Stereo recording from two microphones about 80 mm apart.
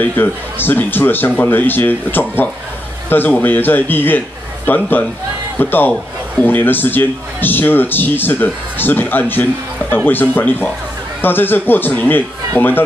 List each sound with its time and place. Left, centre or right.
0.0 s speech: left